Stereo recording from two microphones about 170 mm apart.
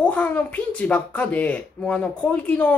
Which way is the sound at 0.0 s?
10° left (ahead or behind).